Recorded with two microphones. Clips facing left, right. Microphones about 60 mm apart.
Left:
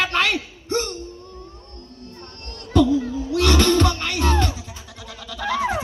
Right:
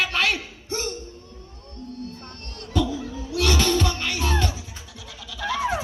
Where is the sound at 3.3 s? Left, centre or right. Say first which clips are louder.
Left 4 dB; left.